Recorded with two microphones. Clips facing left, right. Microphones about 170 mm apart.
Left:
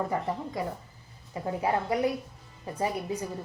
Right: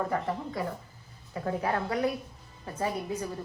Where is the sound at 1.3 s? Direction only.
15° left (ahead or behind).